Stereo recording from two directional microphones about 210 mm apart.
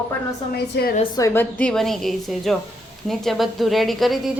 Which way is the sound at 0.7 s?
45° left (ahead or behind).